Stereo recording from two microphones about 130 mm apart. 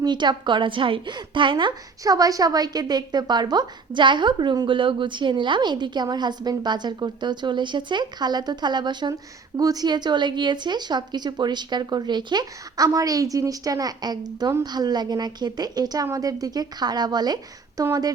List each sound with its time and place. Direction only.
0.0 s a woman's voice: 35° right (ahead or behind)